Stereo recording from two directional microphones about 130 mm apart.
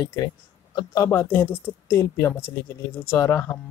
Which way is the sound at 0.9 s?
25° left (ahead or behind).